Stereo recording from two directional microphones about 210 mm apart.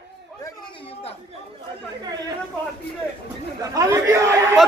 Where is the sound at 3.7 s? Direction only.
15° right (ahead or behind).